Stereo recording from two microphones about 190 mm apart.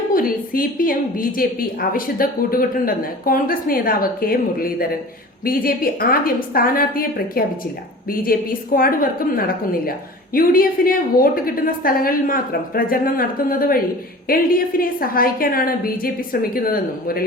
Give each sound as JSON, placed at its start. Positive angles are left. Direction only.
{"t": 0.1, "sound": "a woman's voice", "side_deg": 50}